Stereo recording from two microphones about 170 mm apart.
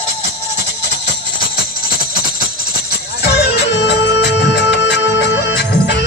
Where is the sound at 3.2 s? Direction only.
80° left.